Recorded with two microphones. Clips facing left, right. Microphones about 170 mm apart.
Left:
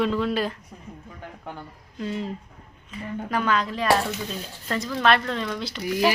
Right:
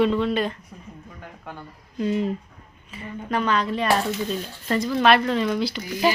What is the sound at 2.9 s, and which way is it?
Speech, centre (ahead or behind).